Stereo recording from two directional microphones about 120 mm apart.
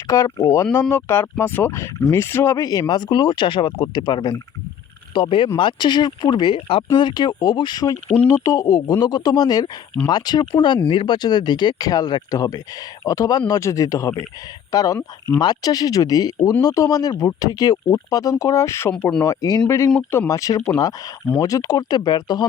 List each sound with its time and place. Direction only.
0.1 s speech: 30° left (ahead or behind)
5.1 s speech: 45° left (ahead or behind)